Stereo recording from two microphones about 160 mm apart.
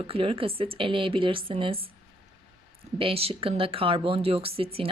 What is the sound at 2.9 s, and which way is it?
Speech, 35° right (ahead or behind).